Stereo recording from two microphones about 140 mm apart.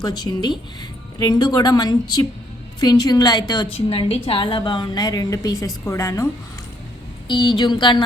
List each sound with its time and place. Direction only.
0.0 s a woman's voice: 30° left (ahead or behind)
3.7 s a woman's voice: 40° left (ahead or behind); by 6.2 s 20° left (ahead or behind)
7.3 s speech: 35° left (ahead or behind)